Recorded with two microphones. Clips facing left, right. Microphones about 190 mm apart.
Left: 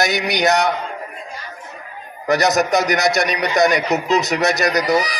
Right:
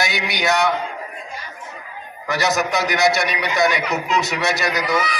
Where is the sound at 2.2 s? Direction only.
40° left (ahead or behind).